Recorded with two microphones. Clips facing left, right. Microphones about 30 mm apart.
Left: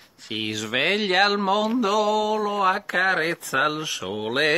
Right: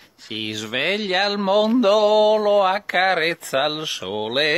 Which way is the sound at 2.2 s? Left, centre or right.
Right.